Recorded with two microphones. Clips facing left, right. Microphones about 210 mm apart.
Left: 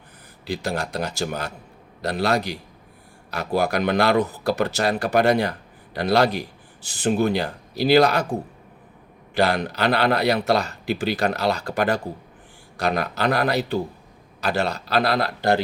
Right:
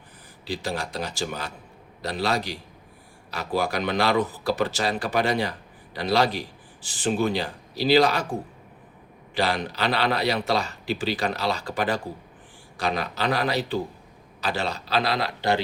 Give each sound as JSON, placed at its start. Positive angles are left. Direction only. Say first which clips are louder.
{"t": 0.4, "sound": "speech", "louder": "left 3 dB", "side_deg": 60}
{"t": 3.6, "sound": "speech", "louder": "left 4 dB", "side_deg": 60}
{"t": 9.3, "sound": "speech", "louder": "left 4 dB", "side_deg": 60}